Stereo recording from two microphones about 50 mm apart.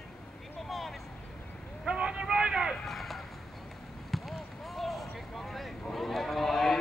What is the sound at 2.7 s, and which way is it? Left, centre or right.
Run, centre.